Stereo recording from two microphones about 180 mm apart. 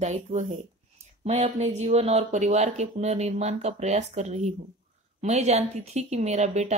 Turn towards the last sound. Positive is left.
turn(degrees=-40)  # may be behind; listen again after turning